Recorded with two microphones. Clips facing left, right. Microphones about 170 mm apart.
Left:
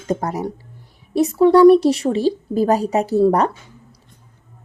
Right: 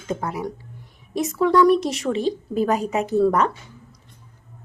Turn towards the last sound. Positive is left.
turn(degrees=35)  # may be behind; listen again after turning